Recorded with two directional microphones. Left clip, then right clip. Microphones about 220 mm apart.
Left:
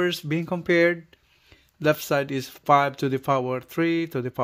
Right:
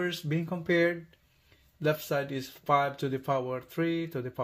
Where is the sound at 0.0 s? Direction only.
55° left (ahead or behind).